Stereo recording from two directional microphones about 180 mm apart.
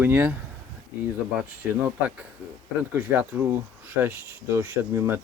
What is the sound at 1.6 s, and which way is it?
Speech, 5° right (ahead or behind).